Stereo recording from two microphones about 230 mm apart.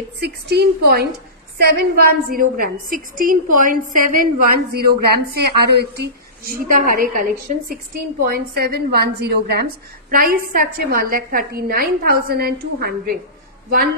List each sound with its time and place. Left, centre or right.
0.2 s a woman's voice: right